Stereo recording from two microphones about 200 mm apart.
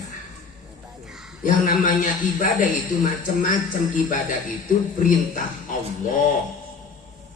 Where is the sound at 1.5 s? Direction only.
45° left (ahead or behind).